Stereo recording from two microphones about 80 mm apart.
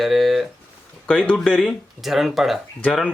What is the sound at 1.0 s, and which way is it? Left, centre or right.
Speech, centre.